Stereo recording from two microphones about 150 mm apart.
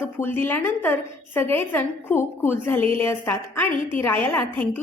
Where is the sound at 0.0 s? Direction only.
15° left (ahead or behind).